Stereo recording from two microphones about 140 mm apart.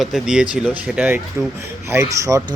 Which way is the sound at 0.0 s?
5° right (ahead or behind).